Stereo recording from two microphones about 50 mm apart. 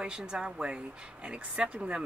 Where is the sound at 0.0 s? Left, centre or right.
Centre.